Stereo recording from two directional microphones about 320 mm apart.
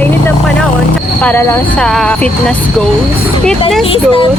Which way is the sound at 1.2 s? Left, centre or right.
Centre.